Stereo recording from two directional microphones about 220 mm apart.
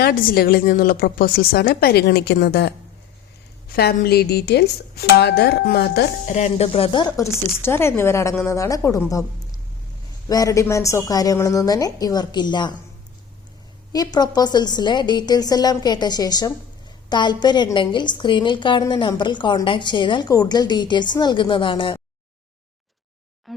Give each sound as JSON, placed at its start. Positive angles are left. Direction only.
{"t": 0.0, "sound": "speech", "side_deg": 40}
{"t": 3.8, "sound": "speech", "side_deg": 45}
{"t": 6.3, "sound": "speech", "side_deg": 30}
{"t": 10.2, "sound": "speech", "side_deg": 15}
{"t": 13.9, "sound": "a woman's voice", "side_deg": 20}
{"t": 23.5, "sound": "a sound", "side_deg": 0}